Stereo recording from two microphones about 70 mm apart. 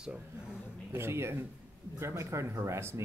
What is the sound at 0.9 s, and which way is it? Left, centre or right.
Speech, right.